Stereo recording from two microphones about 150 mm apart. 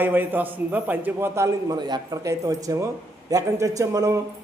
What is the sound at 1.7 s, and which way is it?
A man's voice, 25° right (ahead or behind).